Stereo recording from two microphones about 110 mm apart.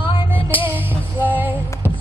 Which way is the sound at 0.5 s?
15° right (ahead or behind).